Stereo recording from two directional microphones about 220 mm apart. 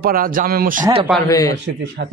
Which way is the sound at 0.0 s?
40° right (ahead or behind).